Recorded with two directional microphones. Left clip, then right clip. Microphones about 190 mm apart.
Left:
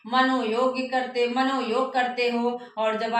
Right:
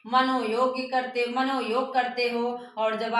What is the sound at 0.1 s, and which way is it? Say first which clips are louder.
A woman's voice: left 1 dB; 15° right (ahead or behind).